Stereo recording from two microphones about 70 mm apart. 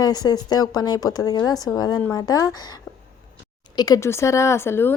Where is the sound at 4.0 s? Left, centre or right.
Left.